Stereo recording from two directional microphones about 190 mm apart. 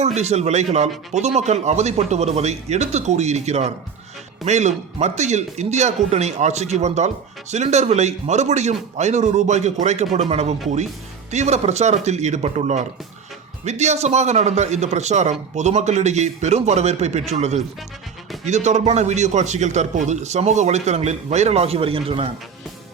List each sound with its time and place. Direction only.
0.0 s a man's voice: 35° right (ahead or behind)